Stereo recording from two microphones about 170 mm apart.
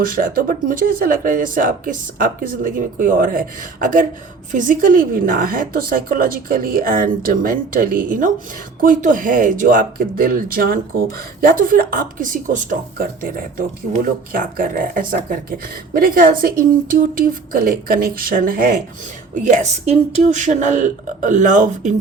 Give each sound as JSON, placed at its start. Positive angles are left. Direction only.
{"t": 0.0, "sound": "speech", "side_deg": -55}